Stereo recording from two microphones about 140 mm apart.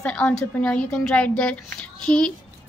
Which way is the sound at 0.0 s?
5° left (ahead or behind).